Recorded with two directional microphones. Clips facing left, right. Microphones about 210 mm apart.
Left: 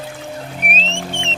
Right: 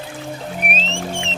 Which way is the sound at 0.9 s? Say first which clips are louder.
Right 1 dB; centre (ahead or behind).